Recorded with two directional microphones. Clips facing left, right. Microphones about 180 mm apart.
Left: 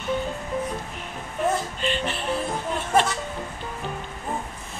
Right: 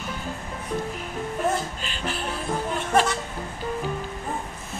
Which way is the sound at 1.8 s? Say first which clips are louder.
Left 4 dB; centre (ahead or behind).